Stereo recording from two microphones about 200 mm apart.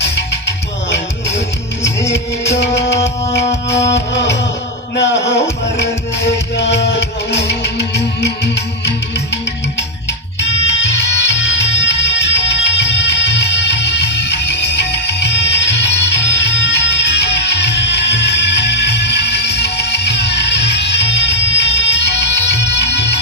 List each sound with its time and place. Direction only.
0.0 s music: 60° left (ahead or behind)
2.6 s music: 60° left (ahead or behind)
3.7 s music: 15° left (ahead or behind)
3.9 s music: 60° left (ahead or behind)
4.9 s a sound: 60° left (ahead or behind)
5.7 s music: 60° left (ahead or behind)
10.7 s music: 60° left (ahead or behind)